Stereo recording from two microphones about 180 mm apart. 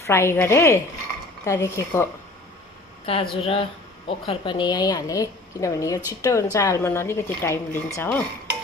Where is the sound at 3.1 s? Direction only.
30° left (ahead or behind); by 8.0 s 15° left (ahead or behind).